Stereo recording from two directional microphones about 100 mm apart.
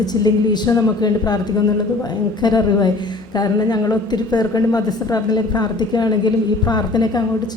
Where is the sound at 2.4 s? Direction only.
40° left (ahead or behind).